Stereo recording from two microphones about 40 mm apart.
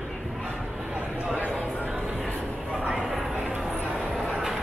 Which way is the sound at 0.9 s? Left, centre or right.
Right.